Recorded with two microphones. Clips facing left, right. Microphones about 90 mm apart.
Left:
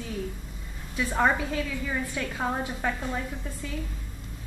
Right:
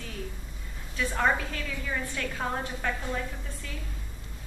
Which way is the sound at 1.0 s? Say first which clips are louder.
Left 2 dB; 15° left (ahead or behind).